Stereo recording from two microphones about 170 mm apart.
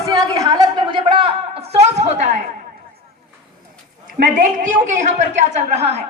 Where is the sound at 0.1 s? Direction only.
20° right (ahead or behind); by 2.3 s 40° right (ahead or behind).